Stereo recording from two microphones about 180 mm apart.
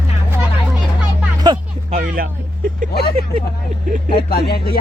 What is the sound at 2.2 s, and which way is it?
Speech, 55° right (ahead or behind).